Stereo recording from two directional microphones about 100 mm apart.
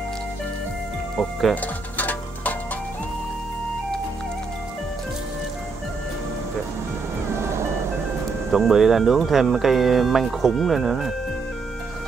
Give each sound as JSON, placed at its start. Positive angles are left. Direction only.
{"t": 1.5, "sound": "music", "side_deg": 15}
{"t": 7.4, "sound": "music", "side_deg": -30}
{"t": 8.5, "sound": "speech", "side_deg": -5}